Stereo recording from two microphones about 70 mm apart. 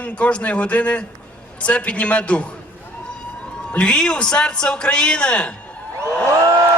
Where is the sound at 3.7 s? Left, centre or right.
Centre.